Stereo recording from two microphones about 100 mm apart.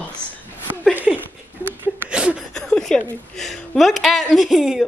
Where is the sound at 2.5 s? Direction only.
5° left (ahead or behind).